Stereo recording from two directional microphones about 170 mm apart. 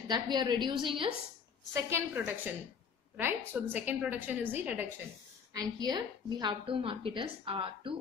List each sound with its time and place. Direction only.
0.1 s a woman's voice: 25° right (ahead or behind)
1.7 s a woman's voice: 15° right (ahead or behind)
5.5 s a woman's voice: 25° right (ahead or behind)